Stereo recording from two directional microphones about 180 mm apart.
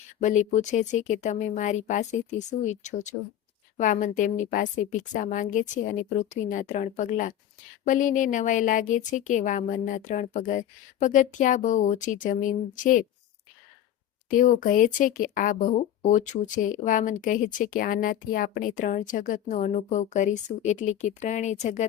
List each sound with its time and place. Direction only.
0.2 s speech: 40° left (ahead or behind)
14.3 s speech: 45° left (ahead or behind)